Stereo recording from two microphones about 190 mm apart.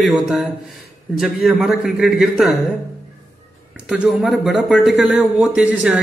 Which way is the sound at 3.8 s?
5° right (ahead or behind).